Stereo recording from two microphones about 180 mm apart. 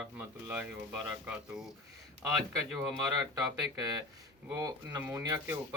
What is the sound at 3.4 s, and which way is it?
Speech, 20° right (ahead or behind).